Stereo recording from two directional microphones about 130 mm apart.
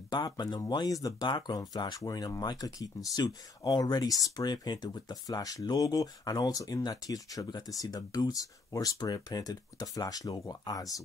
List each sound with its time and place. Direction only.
0.1 s speech: 35° left (ahead or behind)